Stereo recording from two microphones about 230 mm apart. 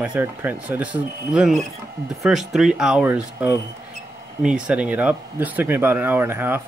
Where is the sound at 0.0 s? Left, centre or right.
Centre.